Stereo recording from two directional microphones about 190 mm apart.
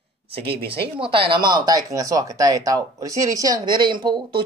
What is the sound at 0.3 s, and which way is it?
Speech, 30° right (ahead or behind).